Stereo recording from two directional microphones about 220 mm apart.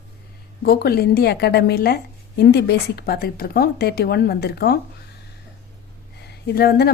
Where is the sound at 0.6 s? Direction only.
45° left (ahead or behind).